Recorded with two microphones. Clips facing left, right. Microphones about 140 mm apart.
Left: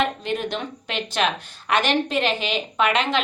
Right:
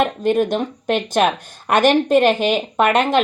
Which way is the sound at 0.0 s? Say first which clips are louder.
Right 7 dB; 50° right (ahead or behind).